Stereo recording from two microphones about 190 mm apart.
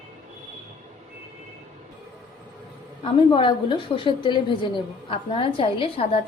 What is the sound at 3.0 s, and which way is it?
A woman's voice, 25° left (ahead or behind).